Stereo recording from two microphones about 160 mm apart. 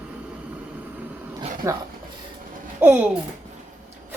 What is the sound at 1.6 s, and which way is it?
Speech, 15° right (ahead or behind).